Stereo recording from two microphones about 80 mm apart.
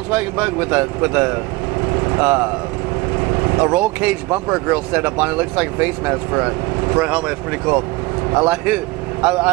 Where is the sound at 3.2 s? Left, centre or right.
Right.